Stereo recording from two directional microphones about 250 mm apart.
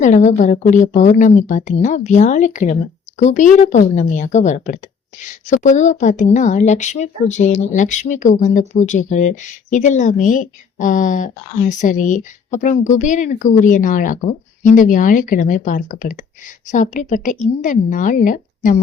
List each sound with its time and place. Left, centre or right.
0.0 s a woman's voice: left